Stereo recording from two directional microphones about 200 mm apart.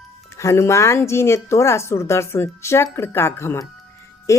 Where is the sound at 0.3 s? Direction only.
15° left (ahead or behind).